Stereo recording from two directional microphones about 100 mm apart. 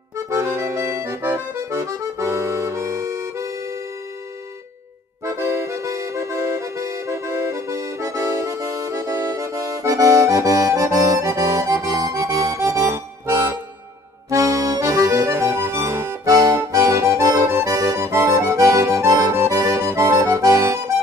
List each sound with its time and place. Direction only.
0.3 s accordion: 30° right (ahead or behind)
5.2 s accordion: 30° right (ahead or behind)
12.1 s music: 40° right (ahead or behind)
12.8 s accordion: 25° right (ahead or behind)